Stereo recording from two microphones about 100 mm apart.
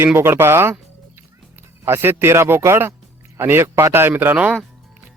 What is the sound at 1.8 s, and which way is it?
Speech, 25° right (ahead or behind).